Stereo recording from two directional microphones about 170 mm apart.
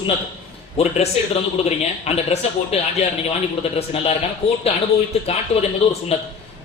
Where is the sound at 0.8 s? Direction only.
35° left (ahead or behind).